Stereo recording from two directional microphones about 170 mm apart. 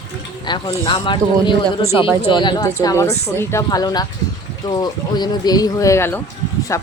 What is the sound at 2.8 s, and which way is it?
Speech, 15° left (ahead or behind).